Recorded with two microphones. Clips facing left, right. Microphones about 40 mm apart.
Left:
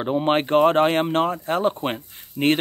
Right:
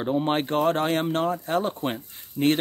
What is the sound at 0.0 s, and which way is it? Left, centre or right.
Speech, left.